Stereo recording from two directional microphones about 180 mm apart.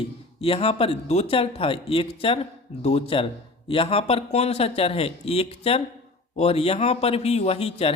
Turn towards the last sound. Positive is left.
turn(degrees=35)  # may be behind; listen again after turning